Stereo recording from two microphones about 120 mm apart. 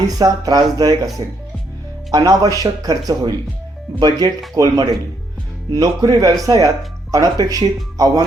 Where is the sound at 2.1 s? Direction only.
30° right (ahead or behind).